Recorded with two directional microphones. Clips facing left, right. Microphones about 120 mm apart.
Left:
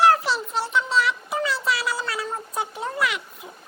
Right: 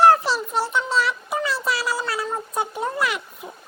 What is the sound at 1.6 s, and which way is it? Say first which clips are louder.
Cat: right 1 dB; 25° right (ahead or behind).